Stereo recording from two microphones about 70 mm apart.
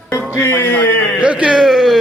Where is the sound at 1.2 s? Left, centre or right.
Centre.